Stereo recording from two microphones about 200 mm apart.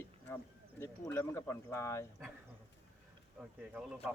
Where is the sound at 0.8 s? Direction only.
15° left (ahead or behind).